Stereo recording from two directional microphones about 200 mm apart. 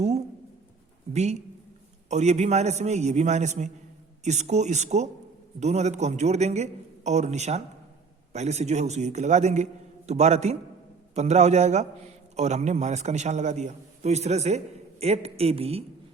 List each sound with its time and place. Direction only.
1.1 s a man's voice: 35° right (ahead or behind)